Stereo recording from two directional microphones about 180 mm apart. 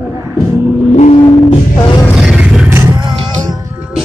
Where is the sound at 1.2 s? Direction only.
25° left (ahead or behind).